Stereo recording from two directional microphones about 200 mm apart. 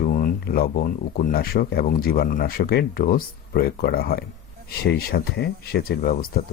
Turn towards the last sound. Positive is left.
turn(degrees=45)  # may be behind; listen again after turning